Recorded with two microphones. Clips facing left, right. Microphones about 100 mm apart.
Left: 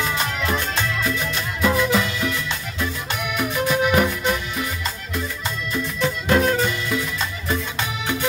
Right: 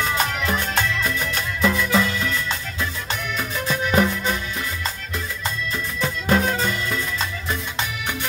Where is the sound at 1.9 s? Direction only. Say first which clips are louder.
Right 1 dB; 25° left (ahead or behind).